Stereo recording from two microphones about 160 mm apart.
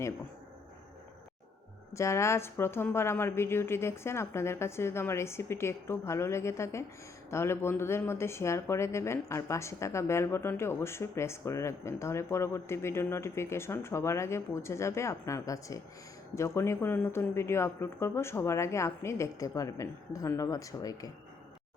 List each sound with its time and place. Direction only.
1.9 s speech: 20° left (ahead or behind)